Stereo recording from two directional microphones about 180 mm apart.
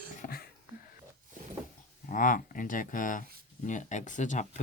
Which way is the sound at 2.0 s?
50° left (ahead or behind).